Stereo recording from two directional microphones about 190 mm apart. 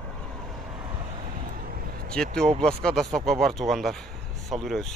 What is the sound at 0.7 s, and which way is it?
Vehicle, 25° right (ahead or behind).